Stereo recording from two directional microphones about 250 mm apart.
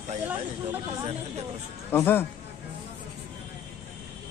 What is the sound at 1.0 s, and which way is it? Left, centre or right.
Speech, right.